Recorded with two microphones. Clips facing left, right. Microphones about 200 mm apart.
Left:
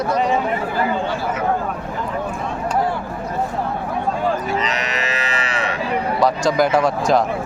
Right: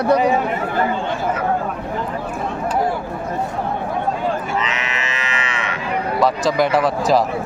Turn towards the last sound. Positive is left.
turn(degrees=0)  # may be behind; listen again after turning